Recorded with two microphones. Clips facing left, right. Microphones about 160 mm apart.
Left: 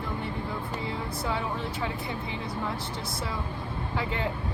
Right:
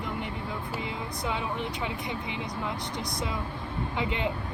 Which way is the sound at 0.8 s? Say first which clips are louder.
Left 1 dB; 20° right (ahead or behind).